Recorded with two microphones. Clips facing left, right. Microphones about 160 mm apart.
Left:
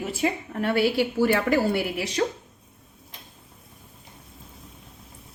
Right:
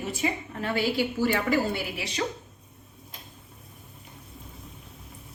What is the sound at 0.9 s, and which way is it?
A woman's voice, 50° left (ahead or behind).